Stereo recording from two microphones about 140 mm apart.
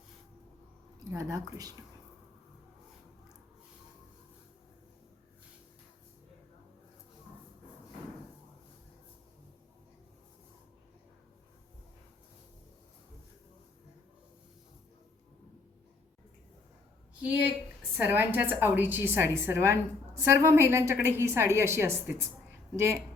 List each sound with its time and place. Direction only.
1.1 s speech: 25° right (ahead or behind)
17.9 s a woman's voice: 10° right (ahead or behind)